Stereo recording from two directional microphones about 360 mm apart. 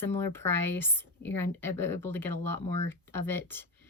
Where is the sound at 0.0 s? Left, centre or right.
Centre.